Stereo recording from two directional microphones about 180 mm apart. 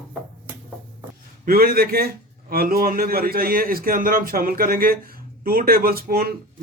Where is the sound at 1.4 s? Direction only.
55° right (ahead or behind).